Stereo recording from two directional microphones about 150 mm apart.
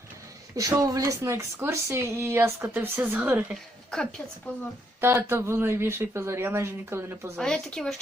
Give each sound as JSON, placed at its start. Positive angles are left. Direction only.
{"t": 0.5, "sound": "a woman's voice", "side_deg": -25}
{"t": 3.9, "sound": "speech", "side_deg": 0}
{"t": 4.9, "sound": "a woman's voice", "side_deg": -15}
{"t": 7.3, "sound": "speech", "side_deg": 5}